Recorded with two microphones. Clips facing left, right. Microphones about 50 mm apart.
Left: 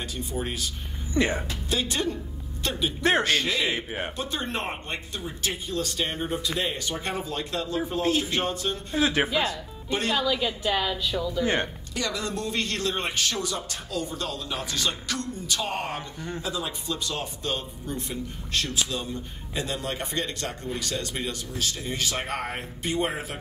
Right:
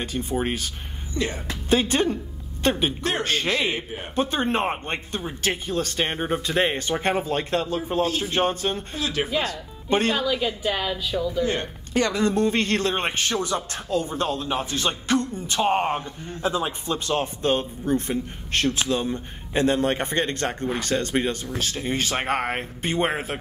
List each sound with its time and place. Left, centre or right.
0.0 s a man's voice: right
1.1 s speech: left
1.7 s a man's voice: right
3.0 s speech: left
3.3 s a man's voice: right
8.9 s speech: left
9.8 s speech: right
10.1 s a woman's voice: centre
11.9 s a man's voice: right